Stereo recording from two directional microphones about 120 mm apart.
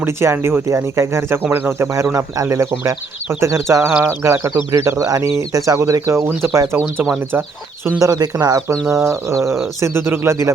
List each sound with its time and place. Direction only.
0.0 s speech: 20° right (ahead or behind)